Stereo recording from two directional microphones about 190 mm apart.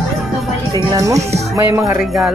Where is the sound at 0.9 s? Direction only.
15° right (ahead or behind).